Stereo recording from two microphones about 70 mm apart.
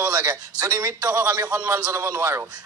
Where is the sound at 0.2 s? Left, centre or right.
Right.